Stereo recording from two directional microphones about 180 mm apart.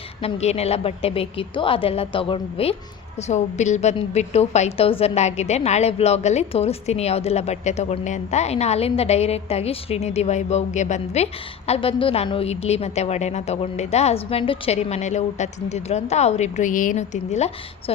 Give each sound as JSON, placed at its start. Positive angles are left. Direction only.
{"t": 0.2, "sound": "a woman's voice", "side_deg": 35}